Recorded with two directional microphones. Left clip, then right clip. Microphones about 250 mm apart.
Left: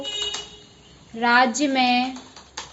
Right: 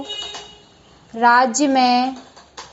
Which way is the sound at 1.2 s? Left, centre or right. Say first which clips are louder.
Right 4 dB; centre.